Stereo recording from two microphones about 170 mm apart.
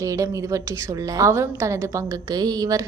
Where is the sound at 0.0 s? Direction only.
20° right (ahead or behind).